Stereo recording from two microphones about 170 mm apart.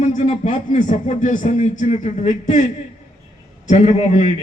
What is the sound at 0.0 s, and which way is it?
Speech, 45° left (ahead or behind).